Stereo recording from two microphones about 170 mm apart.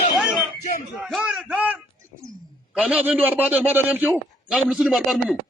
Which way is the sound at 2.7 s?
5° right (ahead or behind).